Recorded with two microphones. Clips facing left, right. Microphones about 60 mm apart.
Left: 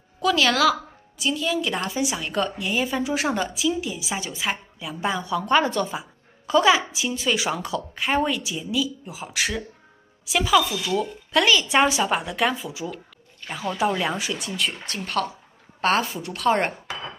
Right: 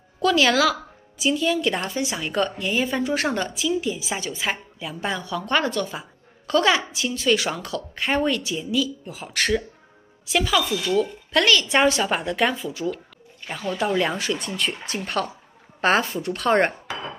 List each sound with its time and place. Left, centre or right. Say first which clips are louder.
0.2 s a woman's voice: right 1 dB; centre
5.0 s a woman's voice: left 3 dB; centre
5.9 s a woman's voice: left 2 dB; centre
11.7 s a woman's voice: even; centre
14.3 s a woman's voice: right 1 dB; centre